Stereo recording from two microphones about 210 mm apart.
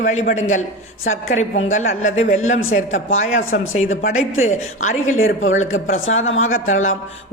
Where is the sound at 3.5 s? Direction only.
35° left (ahead or behind).